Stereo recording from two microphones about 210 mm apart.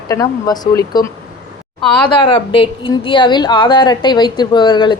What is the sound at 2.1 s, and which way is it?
A woman's voice, 25° left (ahead or behind).